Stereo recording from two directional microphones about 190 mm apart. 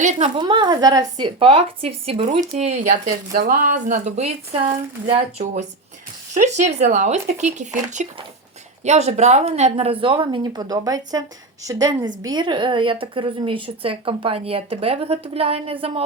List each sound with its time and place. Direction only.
0.0 s a woman's voice: 40° right (ahead or behind)
0.3 s a woman's voice: 25° right (ahead or behind)